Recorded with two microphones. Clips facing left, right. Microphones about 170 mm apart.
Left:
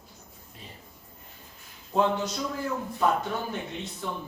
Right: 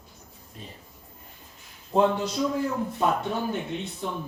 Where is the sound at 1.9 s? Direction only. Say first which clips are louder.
Right 3 dB; 30° right (ahead or behind).